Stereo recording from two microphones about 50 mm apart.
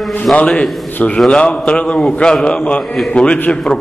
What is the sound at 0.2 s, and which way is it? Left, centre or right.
Speech, left.